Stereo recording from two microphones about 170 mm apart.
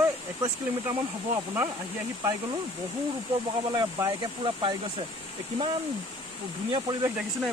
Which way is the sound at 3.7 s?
25° right (ahead or behind).